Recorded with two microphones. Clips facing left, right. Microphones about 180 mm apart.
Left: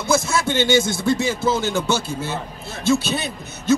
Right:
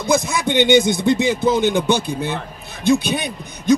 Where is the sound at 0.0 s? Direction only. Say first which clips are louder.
Right 1 dB; 15° right (ahead or behind).